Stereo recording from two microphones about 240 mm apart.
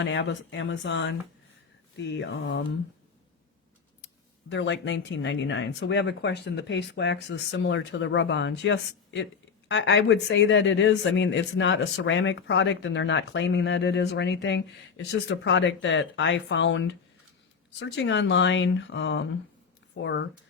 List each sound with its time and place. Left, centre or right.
0.0 s speech: left
4.4 s speech: left